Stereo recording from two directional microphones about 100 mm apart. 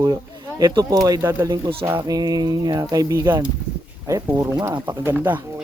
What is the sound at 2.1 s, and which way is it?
Speech, 40° right (ahead or behind).